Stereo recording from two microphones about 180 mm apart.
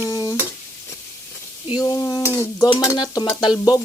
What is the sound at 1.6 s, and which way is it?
Stir, 25° left (ahead or behind).